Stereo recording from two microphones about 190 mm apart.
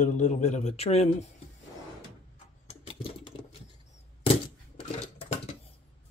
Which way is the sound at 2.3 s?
35° left (ahead or behind).